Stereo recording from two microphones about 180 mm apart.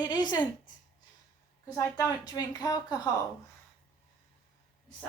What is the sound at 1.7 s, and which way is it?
A woman's voice, 20° left (ahead or behind).